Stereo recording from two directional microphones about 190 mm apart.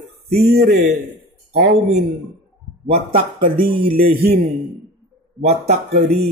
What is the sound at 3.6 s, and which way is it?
Speech, 50° right (ahead or behind).